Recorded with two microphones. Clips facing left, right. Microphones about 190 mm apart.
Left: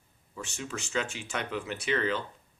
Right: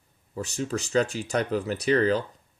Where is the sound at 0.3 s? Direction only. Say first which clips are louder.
Right 9 dB; 40° right (ahead or behind).